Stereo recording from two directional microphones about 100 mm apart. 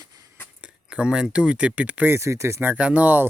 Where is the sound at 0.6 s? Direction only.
10° right (ahead or behind).